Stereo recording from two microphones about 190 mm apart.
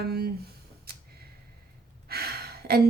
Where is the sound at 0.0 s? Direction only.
55° right (ahead or behind).